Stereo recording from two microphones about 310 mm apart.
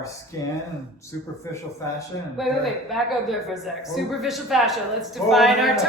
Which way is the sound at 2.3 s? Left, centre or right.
Centre.